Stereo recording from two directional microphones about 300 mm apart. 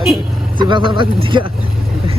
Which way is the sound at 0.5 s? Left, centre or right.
Centre.